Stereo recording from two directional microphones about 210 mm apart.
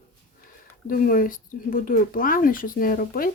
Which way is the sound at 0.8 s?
40° left (ahead or behind).